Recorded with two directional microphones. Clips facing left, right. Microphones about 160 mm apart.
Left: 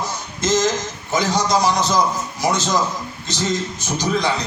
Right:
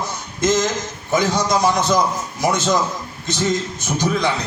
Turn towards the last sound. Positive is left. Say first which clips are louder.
# right 1 dB
turn(degrees=-55)  # may be behind; listen again after turning